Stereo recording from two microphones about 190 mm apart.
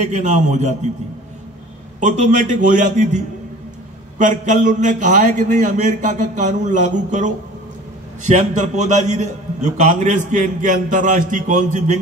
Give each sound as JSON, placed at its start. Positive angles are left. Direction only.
{"t": 0.0, "sound": "a man's voice", "side_deg": -40}
{"t": 2.0, "sound": "a man's voice", "side_deg": -40}
{"t": 4.2, "sound": "a man's voice", "side_deg": -40}